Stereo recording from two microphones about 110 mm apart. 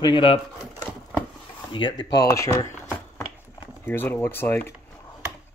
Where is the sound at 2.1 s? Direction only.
25° left (ahead or behind).